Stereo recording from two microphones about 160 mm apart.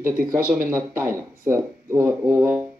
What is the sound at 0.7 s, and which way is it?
Speech, 15° right (ahead or behind).